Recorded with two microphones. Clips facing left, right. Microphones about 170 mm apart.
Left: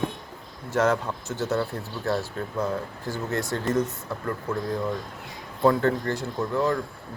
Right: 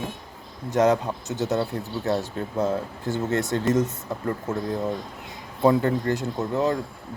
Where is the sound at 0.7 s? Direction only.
15° right (ahead or behind).